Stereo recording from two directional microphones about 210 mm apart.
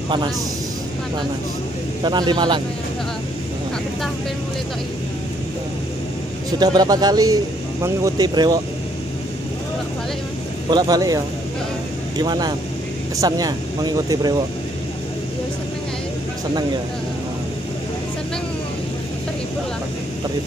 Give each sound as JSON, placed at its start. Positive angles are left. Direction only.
{"t": 2.0, "sound": "speech", "side_deg": -20}
{"t": 6.6, "sound": "speech", "side_deg": -20}
{"t": 10.7, "sound": "speech", "side_deg": -20}
{"t": 12.2, "sound": "speech", "side_deg": -20}